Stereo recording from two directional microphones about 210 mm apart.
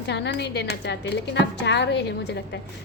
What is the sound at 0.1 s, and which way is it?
A woman's voice, 55° left (ahead or behind).